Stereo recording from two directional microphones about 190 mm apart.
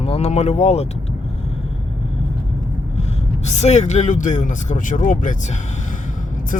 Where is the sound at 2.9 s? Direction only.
35° left (ahead or behind).